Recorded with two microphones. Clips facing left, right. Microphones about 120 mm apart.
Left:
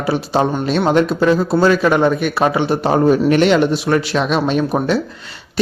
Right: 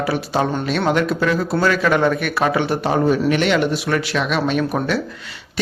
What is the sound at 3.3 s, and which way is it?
A man's voice, 30° left (ahead or behind).